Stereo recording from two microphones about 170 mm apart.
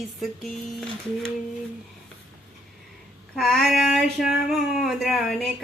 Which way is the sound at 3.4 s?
Centre (ahead or behind).